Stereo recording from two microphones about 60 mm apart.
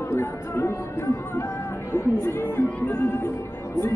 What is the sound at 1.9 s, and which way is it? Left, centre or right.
Speech, left.